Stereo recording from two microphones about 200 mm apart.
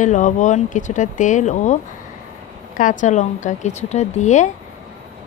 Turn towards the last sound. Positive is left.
turn(degrees=35)  # may be behind; listen again after turning